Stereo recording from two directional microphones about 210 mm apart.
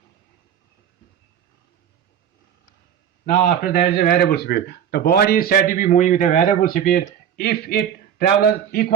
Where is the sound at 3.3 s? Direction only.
50° left (ahead or behind).